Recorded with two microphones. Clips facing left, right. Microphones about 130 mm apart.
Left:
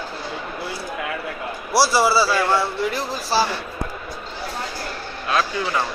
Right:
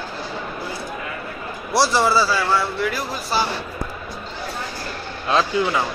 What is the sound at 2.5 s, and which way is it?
Speech, 25° left (ahead or behind).